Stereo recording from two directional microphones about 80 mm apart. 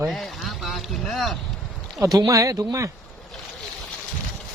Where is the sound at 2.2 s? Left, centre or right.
Right.